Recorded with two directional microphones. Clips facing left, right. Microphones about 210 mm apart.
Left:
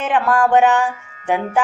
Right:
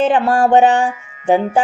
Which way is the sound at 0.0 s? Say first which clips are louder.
Right 3 dB; 30° right (ahead or behind).